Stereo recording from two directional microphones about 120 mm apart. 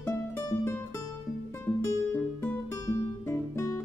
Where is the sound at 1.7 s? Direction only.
15° left (ahead or behind).